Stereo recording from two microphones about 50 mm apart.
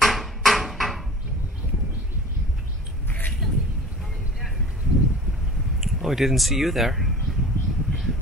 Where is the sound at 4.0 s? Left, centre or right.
Centre.